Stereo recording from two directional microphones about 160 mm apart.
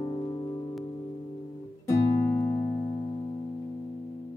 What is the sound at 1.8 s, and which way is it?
Music, 15° left (ahead or behind).